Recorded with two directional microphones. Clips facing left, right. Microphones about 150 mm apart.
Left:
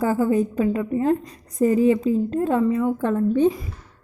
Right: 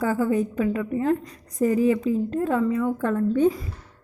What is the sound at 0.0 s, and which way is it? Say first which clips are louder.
A woman's voice: left 3 dB; 30° left (ahead or behind).